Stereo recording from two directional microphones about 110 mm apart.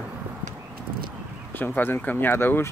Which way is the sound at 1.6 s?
20° left (ahead or behind).